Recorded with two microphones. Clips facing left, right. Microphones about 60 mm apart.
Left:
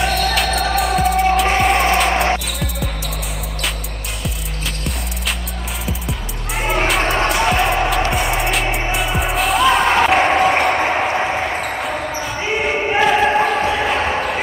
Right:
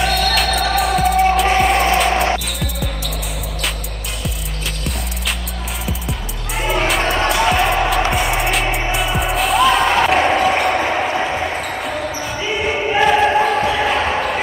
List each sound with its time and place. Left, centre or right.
0.0 s music: centre
2.4 s basketball bounce: centre
5.9 s music: centre
10.3 s a sound: centre
10.7 s basketball bounce: centre
12.4 s basketball bounce: left
12.6 s choir: left
13.0 s choir: centre
13.7 s basketball bounce: centre